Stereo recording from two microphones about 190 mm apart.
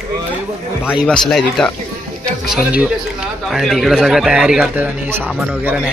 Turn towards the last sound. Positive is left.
turn(degrees=-10)  # may be behind; listen again after turning